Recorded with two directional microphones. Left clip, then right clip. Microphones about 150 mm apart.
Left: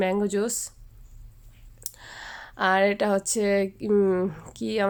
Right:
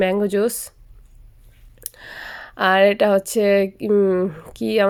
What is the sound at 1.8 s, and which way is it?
Speech, 30° right (ahead or behind).